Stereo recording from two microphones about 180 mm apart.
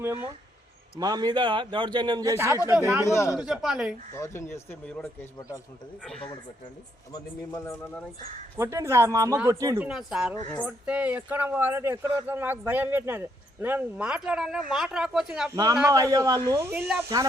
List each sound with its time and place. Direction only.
0.9 s a man's voice: 20° right (ahead or behind)
3.0 s speech: 15° left (ahead or behind)
3.3 s speech: 5° right (ahead or behind)
4.1 s speech: 15° left (ahead or behind)
7.1 s speech: 20° left (ahead or behind)
8.5 s speech: 15° right (ahead or behind)
10.1 s speech: centre (ahead or behind)
15.5 s a man's voice: 20° right (ahead or behind)